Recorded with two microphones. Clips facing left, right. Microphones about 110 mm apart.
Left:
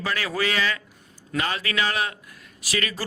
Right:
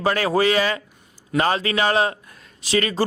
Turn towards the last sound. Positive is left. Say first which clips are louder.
# right 8 dB
turn(degrees=-30)  # may be behind; listen again after turning